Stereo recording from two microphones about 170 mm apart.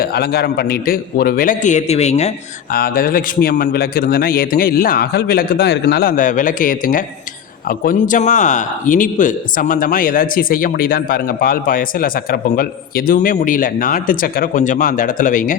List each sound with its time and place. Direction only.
0.0 s a man's voice: 65° left (ahead or behind); by 2.3 s 40° left (ahead or behind)
2.7 s a man's voice: 60° left (ahead or behind)